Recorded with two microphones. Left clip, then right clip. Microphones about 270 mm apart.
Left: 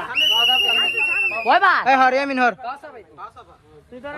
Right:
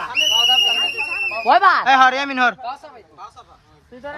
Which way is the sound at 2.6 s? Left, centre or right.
Right.